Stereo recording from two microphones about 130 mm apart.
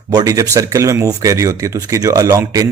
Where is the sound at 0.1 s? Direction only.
25° right (ahead or behind).